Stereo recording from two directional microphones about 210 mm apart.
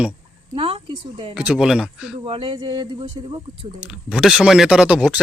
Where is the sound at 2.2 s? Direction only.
25° right (ahead or behind).